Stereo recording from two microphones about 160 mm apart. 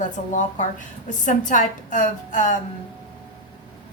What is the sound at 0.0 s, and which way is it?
A woman's voice, 50° left (ahead or behind).